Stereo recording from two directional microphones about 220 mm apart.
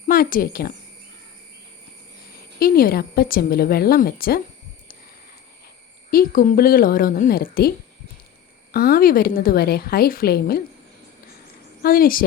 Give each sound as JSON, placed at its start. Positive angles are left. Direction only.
{"t": 0.1, "sound": "speech", "side_deg": 40}
{"t": 2.6, "sound": "a woman's voice", "side_deg": 40}
{"t": 6.1, "sound": "speech", "side_deg": 40}
{"t": 8.7, "sound": "a woman's voice", "side_deg": 40}
{"t": 11.8, "sound": "speech", "side_deg": 40}